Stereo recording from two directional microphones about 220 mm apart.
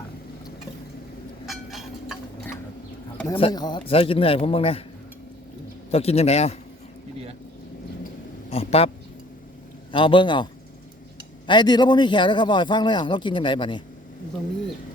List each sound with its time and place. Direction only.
1.5 s a sound: centre (ahead or behind)
3.3 s a man's voice: 20° left (ahead or behind)
5.9 s a man's voice: 30° left (ahead or behind)
8.4 s speech: 25° left (ahead or behind)
9.9 s a man's voice: 25° left (ahead or behind)